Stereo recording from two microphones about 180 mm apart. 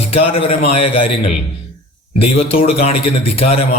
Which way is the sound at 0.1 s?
35° left (ahead or behind).